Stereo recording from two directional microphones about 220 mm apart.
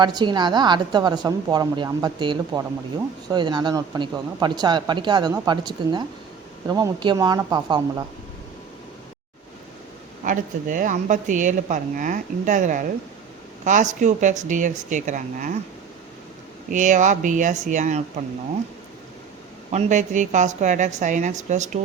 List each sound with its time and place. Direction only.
0.0 s speech: 20° right (ahead or behind)
10.2 s speech: 35° right (ahead or behind)
16.7 s speech: 35° right (ahead or behind)
19.7 s speech: 35° right (ahead or behind)